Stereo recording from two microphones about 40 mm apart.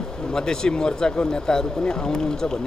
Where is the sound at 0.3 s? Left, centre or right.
Centre.